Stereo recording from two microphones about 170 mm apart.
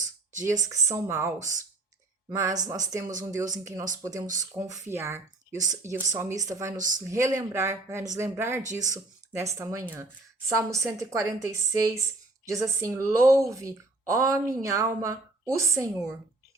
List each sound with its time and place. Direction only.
0.4 s speech: 20° right (ahead or behind)
2.3 s speech: 20° right (ahead or behind)